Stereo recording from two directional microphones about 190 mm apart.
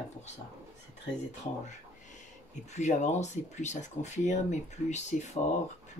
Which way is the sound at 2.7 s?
40° left (ahead or behind).